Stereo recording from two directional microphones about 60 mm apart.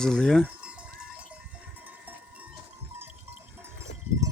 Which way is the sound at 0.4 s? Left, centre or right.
Centre.